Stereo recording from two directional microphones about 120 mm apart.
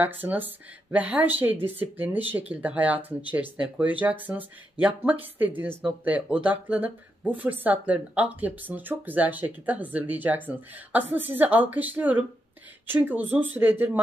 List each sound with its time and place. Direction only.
0.0 s speech: 15° right (ahead or behind)